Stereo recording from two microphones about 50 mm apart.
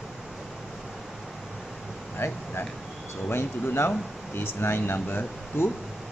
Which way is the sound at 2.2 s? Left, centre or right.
Left.